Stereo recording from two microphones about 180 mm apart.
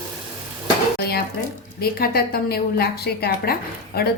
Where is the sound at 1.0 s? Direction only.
60° left (ahead or behind).